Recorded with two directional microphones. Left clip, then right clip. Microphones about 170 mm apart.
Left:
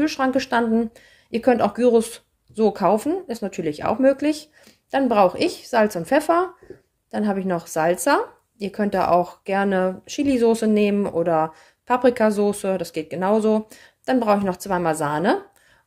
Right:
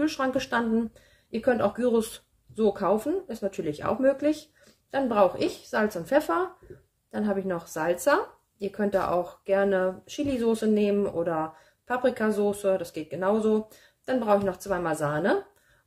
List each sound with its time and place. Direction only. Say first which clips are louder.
0.0 s speech: left 6 dB; 35° left (ahead or behind)